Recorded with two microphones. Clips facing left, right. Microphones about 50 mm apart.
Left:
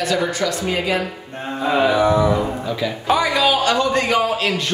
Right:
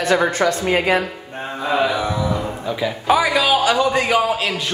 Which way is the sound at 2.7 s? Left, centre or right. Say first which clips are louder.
Right 4 dB; centre.